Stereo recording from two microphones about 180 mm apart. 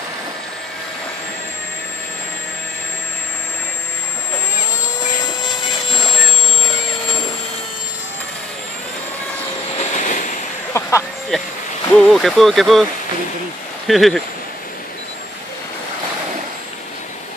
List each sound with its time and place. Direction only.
9.9 s vehicle: 45° left (ahead or behind)
10.7 s a sound: 15° left (ahead or behind)
11.9 s speech: centre (ahead or behind)
13.8 s speech: centre (ahead or behind)